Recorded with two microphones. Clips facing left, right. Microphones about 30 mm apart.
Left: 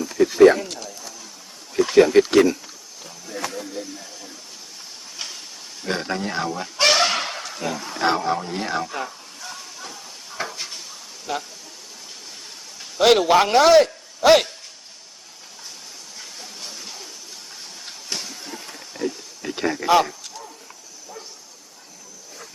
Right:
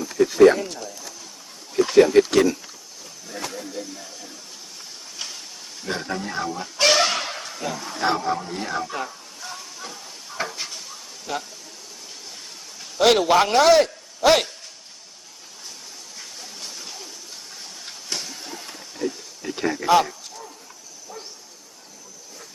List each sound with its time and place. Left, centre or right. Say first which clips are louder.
0.0 s speech: left 1 dB; centre
1.7 s speech: even; centre
3.8 s speech: left 1 dB; centre
6.0 s speech: left 2 dB; left
6.5 s speech: left 2 dB; left
6.8 s a sound: left 1 dB; centre
7.6 s speech: left 2 dB; centre
8.0 s speech: left 2 dB; left
8.9 s stir: even; centre
11.3 s a man's voice: left 1 dB; centre
13.0 s a man's voice: left 1 dB; centre
17.5 s a sound: left 1 dB; centre
19.4 s a sound: left 1 dB; left
19.8 s speech: even; centre